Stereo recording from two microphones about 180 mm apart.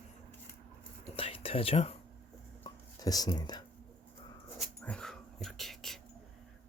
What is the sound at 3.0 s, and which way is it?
Speech, 20° left (ahead or behind).